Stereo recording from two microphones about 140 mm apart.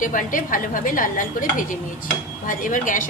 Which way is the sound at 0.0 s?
70° left (ahead or behind).